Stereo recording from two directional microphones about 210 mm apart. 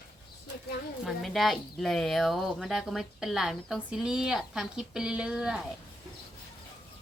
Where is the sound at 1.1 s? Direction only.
Centre (ahead or behind).